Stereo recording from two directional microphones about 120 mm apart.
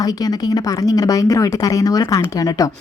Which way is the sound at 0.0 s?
30° left (ahead or behind).